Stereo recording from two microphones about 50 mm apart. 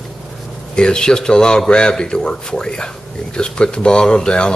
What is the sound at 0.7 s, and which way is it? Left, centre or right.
Speech, centre.